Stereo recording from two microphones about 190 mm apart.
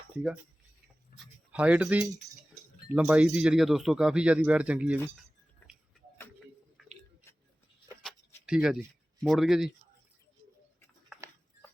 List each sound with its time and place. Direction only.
1.1 s a sound: 50° left (ahead or behind)
1.5 s speech: 5° right (ahead or behind)
6.8 s chewing: centre (ahead or behind)
8.4 s speech: 5° right (ahead or behind)